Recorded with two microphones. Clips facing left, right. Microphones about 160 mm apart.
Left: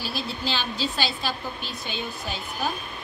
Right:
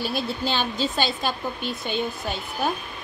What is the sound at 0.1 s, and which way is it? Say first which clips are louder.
Speech: right 4 dB; 50° right (ahead or behind).